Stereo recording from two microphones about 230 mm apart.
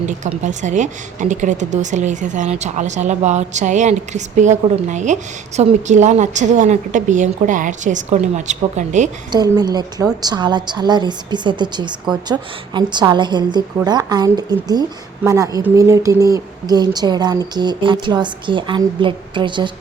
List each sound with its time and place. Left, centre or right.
0.0 s a woman's voice: right
9.3 s a woman's voice: centre